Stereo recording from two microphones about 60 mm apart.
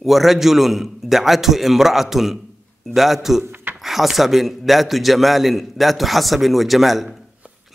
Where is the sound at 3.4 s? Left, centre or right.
Right.